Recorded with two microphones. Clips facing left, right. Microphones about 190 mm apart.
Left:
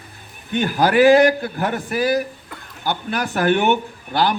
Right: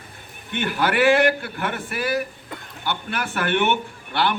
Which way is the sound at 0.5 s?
35° left (ahead or behind).